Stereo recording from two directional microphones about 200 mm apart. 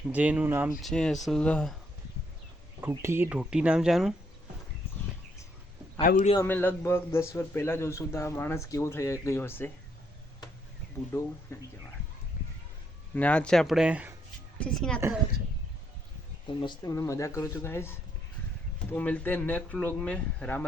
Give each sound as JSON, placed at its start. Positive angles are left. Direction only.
{"t": 0.1, "sound": "speech", "side_deg": -5}
{"t": 0.8, "sound": "speech", "side_deg": 0}
{"t": 2.8, "sound": "speech", "side_deg": -15}
{"t": 6.0, "sound": "a man's voice", "side_deg": 40}
{"t": 6.3, "sound": "a man's voice", "side_deg": 10}
{"t": 11.1, "sound": "a man's voice", "side_deg": 15}
{"t": 13.1, "sound": "speech", "side_deg": 5}
{"t": 16.5, "sound": "a man's voice", "side_deg": 25}